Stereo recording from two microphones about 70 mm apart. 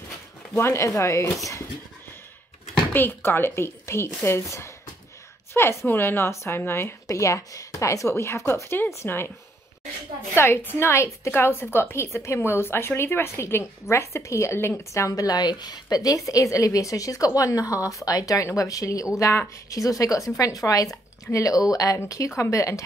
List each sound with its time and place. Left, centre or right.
0.6 s a woman's voice: left
2.9 s a woman's voice: left
7.1 s a woman's voice: left
10.3 s a woman's voice: left
21.9 s a woman's voice: left